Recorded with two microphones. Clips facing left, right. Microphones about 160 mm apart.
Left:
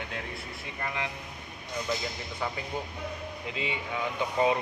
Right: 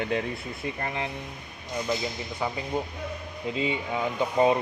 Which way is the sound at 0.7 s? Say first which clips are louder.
Left 1 dB; 40° right (ahead or behind).